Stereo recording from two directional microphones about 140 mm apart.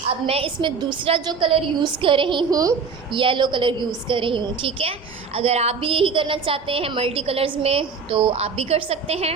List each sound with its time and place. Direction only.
0.3 s a woman's voice: 40° right (ahead or behind)